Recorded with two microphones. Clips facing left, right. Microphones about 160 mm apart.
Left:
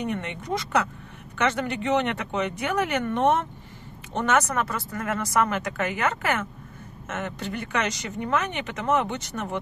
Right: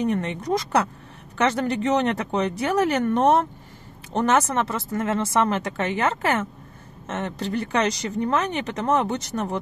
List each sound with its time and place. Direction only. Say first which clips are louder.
0.0 s speech: right 6 dB; 35° right (ahead or behind)